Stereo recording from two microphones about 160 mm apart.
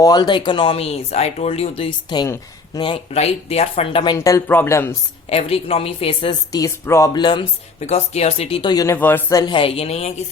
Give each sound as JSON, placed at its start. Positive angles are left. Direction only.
{"t": 0.0, "sound": "speech", "side_deg": 25}
{"t": 5.3, "sound": "speech", "side_deg": 40}
{"t": 6.5, "sound": "speech", "side_deg": 20}
{"t": 7.9, "sound": "speech", "side_deg": 40}
{"t": 8.7, "sound": "speech", "side_deg": 20}
{"t": 9.4, "sound": "speech", "side_deg": 30}